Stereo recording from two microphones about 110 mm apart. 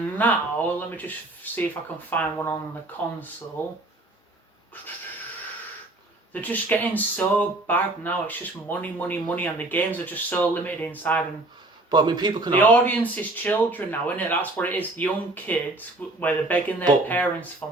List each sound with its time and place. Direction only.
0.2 s speech: 15° left (ahead or behind)
6.3 s speech: 15° left (ahead or behind)
11.9 s a man's voice: 45° right (ahead or behind)
12.5 s speech: 15° left (ahead or behind)